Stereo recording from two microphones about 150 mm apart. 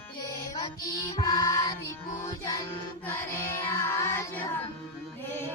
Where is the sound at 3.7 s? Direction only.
15° left (ahead or behind).